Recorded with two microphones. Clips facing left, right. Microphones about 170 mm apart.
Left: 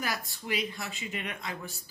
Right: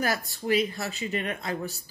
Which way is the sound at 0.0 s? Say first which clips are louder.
Right 7 dB; 40° right (ahead or behind).